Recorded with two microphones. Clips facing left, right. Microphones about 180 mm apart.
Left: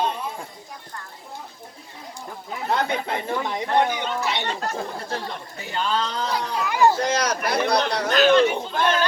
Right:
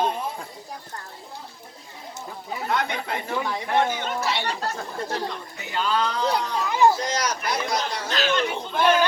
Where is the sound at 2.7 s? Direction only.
30° left (ahead or behind).